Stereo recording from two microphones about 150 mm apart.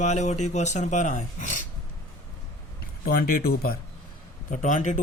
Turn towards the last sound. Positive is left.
turn(degrees=55)  # may be behind; listen again after turning